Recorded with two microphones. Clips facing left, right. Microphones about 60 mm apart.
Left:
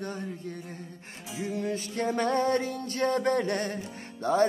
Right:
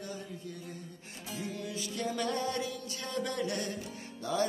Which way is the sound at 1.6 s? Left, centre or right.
Left.